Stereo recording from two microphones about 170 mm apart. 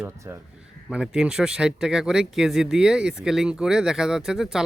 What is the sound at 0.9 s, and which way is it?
A man's voice, 5° right (ahead or behind).